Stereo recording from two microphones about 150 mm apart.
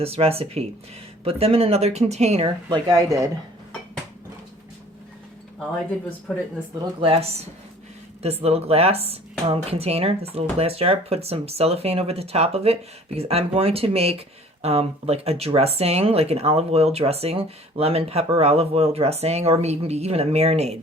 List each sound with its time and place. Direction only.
0.0 s speech: 40° right (ahead or behind)
2.6 s speech: 25° right (ahead or behind)
6.3 s speech: centre (ahead or behind)
7.0 s speech: 40° right (ahead or behind)